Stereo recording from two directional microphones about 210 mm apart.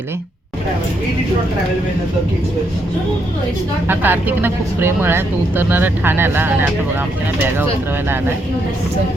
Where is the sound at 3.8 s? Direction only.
10° right (ahead or behind).